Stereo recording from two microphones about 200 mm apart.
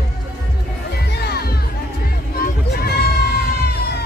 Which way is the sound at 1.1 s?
55° left (ahead or behind).